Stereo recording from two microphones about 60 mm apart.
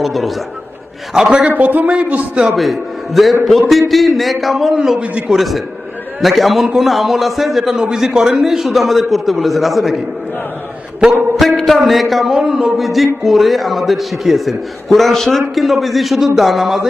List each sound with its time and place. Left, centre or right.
0.0 s a man's voice: centre
1.5 s a man's voice: right
2.6 s a man's voice: centre
4.9 s a man's voice: centre
5.3 s speech: centre
11.3 s speech: centre